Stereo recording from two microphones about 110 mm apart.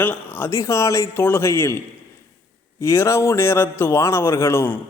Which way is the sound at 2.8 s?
25° left (ahead or behind).